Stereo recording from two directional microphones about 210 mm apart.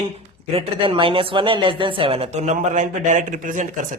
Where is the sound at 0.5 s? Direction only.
25° right (ahead or behind).